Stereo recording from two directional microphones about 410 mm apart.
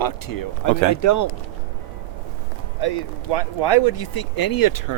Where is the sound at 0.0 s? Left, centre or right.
Left.